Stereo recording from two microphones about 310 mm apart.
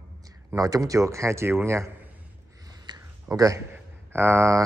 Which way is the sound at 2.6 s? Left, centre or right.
Centre.